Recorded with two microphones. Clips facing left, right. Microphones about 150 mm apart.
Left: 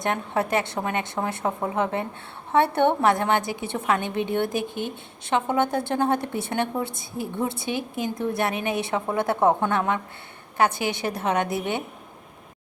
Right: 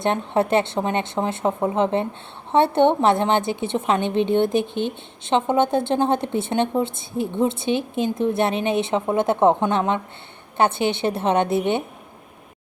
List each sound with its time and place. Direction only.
0.0 s a woman's voice: 25° right (ahead or behind)